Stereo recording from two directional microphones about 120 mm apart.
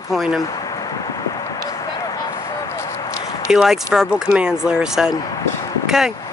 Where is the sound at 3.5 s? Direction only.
5° right (ahead or behind).